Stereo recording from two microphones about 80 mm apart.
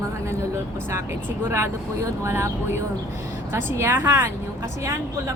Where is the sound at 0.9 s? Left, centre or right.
Right.